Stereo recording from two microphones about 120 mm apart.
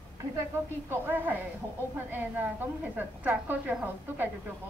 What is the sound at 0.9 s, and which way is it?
A woman's voice, 15° right (ahead or behind).